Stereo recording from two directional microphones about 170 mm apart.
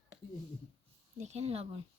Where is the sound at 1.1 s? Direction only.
40° right (ahead or behind).